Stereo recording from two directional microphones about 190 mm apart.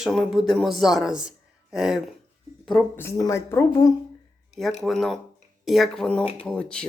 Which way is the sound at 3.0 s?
15° left (ahead or behind).